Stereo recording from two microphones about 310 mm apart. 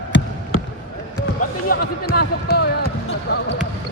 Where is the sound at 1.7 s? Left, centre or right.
Left.